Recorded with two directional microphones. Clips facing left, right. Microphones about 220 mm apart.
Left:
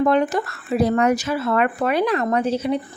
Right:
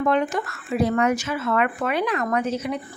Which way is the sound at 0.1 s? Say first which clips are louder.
Left 3 dB; 35° left (ahead or behind).